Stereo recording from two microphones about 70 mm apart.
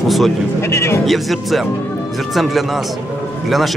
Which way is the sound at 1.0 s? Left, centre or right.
Centre.